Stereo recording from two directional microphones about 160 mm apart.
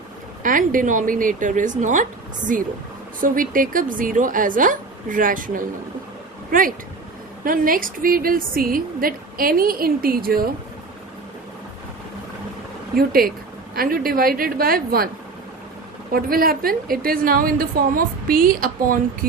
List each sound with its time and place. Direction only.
0.4 s speech: 60° right (ahead or behind)
3.2 s a woman's voice: 60° right (ahead or behind)
13.0 s a woman's voice: 65° right (ahead or behind)
16.1 s a woman's voice: 65° right (ahead or behind)